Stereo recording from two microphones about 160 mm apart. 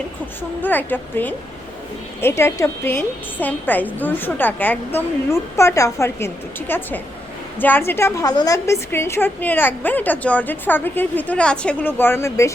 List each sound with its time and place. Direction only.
0.6 s a woman's voice: 10° left (ahead or behind)